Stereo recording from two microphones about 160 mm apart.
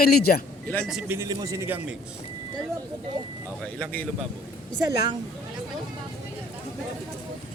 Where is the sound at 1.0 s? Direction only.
15° right (ahead or behind).